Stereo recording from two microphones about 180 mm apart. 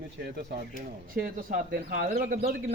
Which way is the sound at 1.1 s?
50° right (ahead or behind).